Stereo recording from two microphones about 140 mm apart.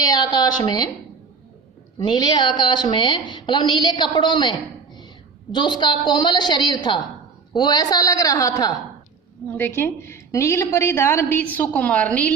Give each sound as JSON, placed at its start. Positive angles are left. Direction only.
{"t": 0.0, "sound": "a woman's voice", "side_deg": 30}
{"t": 2.0, "sound": "a woman's voice", "side_deg": 30}